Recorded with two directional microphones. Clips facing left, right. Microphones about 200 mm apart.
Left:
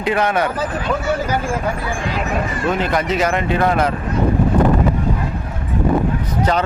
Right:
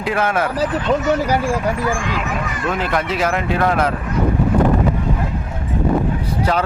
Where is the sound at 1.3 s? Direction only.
35° right (ahead or behind).